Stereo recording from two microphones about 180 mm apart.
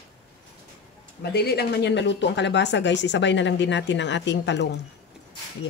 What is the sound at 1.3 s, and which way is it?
Speech, 60° left (ahead or behind).